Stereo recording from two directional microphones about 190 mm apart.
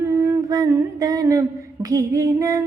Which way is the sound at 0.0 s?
20° right (ahead or behind).